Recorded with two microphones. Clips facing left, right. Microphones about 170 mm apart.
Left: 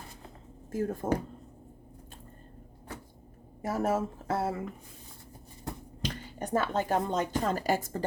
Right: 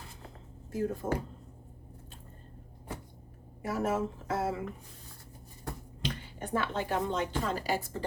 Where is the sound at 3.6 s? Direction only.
40° left (ahead or behind).